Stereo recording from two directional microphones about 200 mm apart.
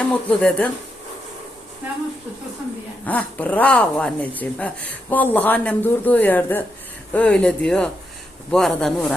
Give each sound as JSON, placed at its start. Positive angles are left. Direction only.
{"t": 0.0, "sound": "speech", "side_deg": 5}
{"t": 3.1, "sound": "speech", "side_deg": 5}